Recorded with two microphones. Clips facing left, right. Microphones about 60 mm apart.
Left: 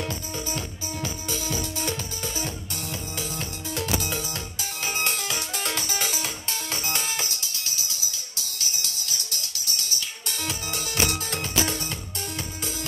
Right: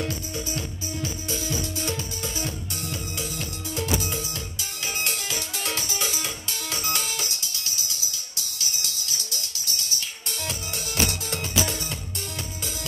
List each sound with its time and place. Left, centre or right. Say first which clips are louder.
0.0 s music: right 1 dB; left
10.7 s music: left 1 dB; left